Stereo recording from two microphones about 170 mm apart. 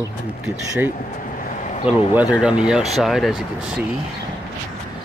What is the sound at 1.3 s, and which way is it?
Vehicle, 50° left (ahead or behind).